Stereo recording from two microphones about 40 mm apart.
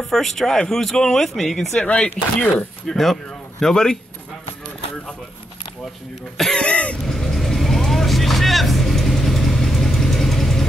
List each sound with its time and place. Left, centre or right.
0.0 s speech: centre
1.9 s speech: left
3.0 s speech: centre
6.5 s cough: left
7.1 s vehicle: centre